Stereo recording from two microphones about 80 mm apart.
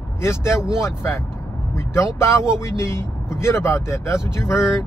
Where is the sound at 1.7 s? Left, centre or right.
Left.